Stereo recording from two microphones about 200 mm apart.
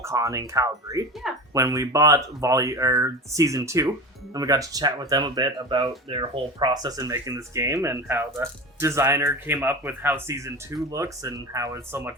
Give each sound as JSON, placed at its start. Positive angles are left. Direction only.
{"t": 0.0, "sound": "speech", "side_deg": -15}